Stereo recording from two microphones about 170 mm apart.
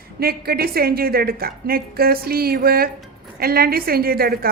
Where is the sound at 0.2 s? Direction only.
65° right (ahead or behind).